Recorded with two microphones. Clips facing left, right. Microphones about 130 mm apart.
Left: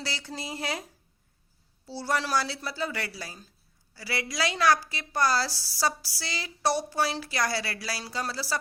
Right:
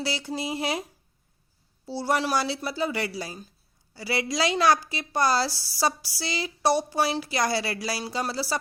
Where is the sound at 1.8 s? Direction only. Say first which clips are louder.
Right 4 dB; 15° right (ahead or behind).